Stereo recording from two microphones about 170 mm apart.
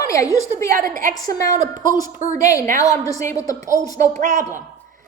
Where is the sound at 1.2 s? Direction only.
25° left (ahead or behind).